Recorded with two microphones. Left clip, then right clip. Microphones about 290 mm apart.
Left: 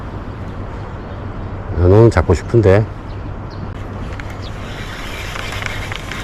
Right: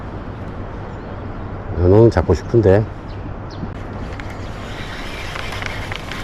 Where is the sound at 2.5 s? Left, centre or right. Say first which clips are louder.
Left 1 dB; centre.